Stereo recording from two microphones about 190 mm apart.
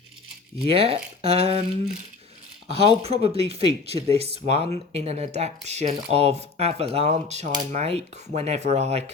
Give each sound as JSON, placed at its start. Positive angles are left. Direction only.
{"t": 0.7, "sound": "speech", "side_deg": -30}
{"t": 2.6, "sound": "speech", "side_deg": -30}